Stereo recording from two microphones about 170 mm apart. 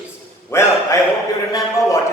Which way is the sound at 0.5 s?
15° left (ahead or behind).